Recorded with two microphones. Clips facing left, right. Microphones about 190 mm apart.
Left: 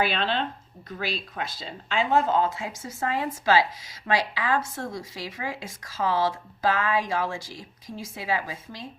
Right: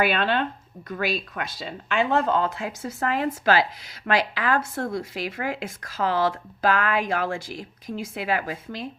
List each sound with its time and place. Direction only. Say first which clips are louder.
0.0 s speech: right 3 dB; 55° right (ahead or behind)